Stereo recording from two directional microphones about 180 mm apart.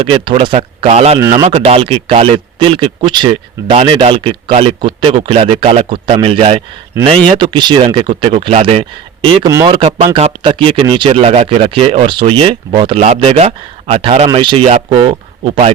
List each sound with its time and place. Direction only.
0.0 s a man's voice: 30° right (ahead or behind)